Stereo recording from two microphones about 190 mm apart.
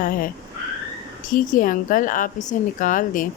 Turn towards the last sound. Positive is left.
turn(degrees=45)  # may be behind; listen again after turning